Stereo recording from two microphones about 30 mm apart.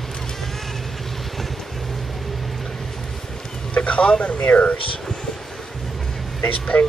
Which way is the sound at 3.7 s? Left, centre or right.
Left.